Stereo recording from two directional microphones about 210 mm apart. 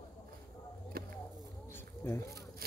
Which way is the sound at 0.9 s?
45° right (ahead or behind).